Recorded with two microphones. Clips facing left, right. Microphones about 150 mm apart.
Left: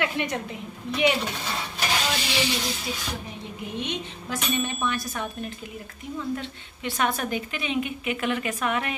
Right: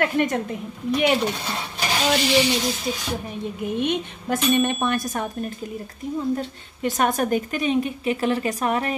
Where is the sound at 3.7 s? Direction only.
55° right (ahead or behind); by 8.9 s 35° right (ahead or behind).